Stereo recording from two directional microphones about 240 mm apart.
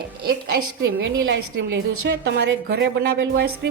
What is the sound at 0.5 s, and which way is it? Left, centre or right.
A woman's voice, right.